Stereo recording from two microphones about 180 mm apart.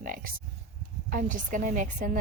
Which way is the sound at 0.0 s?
50° right (ahead or behind).